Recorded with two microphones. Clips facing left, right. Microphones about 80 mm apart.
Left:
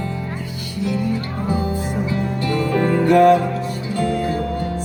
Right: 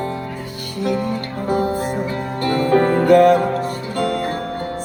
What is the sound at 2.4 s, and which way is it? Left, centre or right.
Music, right.